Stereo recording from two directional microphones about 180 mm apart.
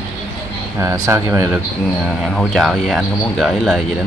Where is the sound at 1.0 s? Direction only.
15° right (ahead or behind).